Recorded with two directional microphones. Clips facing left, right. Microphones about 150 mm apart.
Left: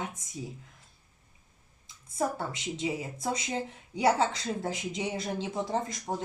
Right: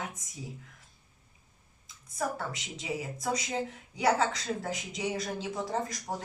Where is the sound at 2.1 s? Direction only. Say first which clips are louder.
Left 3 dB; 30° left (ahead or behind).